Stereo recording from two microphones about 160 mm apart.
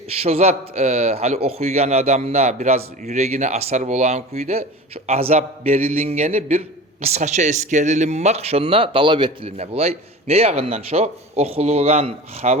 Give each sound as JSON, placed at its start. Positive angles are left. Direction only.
{"t": 0.1, "sound": "a man's voice", "side_deg": -40}